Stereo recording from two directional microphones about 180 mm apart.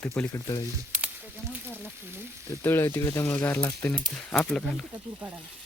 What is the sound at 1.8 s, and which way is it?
Speech, 10° right (ahead or behind).